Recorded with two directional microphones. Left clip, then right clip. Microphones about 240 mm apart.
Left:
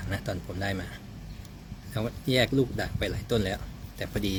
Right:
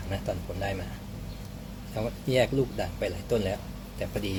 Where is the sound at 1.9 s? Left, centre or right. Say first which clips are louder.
Right 1 dB; left.